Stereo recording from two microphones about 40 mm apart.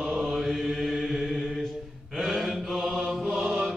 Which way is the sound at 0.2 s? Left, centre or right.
Centre.